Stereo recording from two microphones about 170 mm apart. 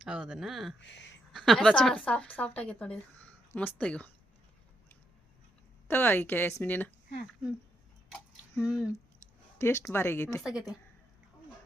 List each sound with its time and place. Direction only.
0.0 s speech: 5° right (ahead or behind)
0.8 s speech: 90° left
1.3 s a woman's voice: centre (ahead or behind)
5.9 s a woman's voice: 10° left (ahead or behind)
8.5 s speech: centre (ahead or behind)
9.6 s a woman's voice: 15° left (ahead or behind)
10.4 s speech: 5° right (ahead or behind)